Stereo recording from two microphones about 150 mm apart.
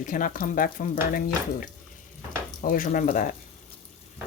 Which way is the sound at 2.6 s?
60° left (ahead or behind).